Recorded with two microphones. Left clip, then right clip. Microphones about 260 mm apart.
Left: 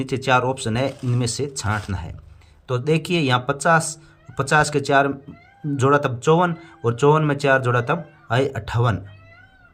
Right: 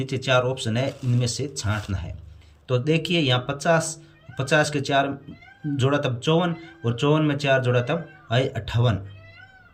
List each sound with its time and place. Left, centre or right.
0.0 s speech: centre